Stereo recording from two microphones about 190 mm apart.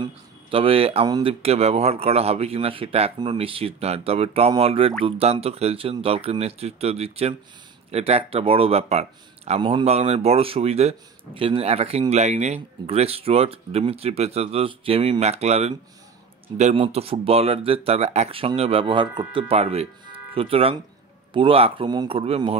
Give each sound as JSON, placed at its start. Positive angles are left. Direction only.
{"t": 0.0, "sound": "speech", "side_deg": -30}